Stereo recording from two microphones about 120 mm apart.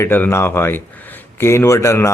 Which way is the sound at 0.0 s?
20° left (ahead or behind).